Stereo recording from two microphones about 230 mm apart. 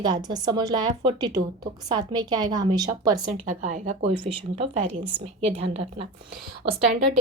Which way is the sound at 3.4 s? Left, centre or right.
Right.